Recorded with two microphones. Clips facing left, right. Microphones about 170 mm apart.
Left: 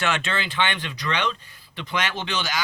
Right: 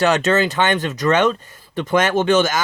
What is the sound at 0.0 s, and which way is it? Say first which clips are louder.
Speech: right 10 dB; 40° right (ahead or behind).